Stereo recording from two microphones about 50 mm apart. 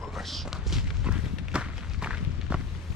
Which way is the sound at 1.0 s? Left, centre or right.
Right.